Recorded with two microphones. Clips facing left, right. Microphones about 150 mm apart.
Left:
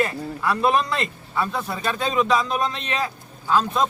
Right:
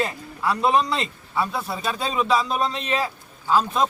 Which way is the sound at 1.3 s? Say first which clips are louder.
Even; 10° right (ahead or behind).